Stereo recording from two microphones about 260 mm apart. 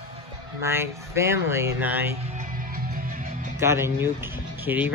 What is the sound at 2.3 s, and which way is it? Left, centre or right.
Music, right.